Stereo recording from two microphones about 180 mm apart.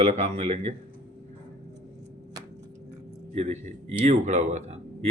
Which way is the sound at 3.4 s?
35° right (ahead or behind).